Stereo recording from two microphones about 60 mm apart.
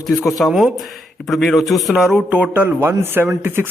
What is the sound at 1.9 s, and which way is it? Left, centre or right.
Speech, centre.